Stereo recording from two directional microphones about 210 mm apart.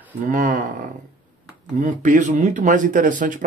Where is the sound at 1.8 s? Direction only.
35° right (ahead or behind).